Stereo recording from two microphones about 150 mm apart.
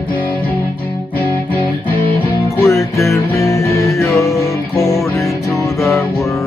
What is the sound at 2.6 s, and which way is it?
Music, 20° left (ahead or behind).